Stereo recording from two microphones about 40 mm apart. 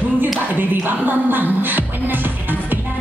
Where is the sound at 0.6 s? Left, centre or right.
Right.